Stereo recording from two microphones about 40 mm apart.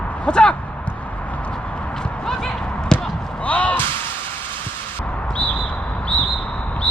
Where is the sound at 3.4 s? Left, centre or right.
Left.